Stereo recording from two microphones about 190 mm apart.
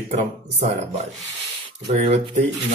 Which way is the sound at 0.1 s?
35° right (ahead or behind).